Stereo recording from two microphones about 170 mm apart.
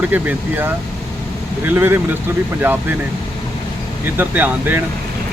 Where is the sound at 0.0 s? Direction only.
10° right (ahead or behind).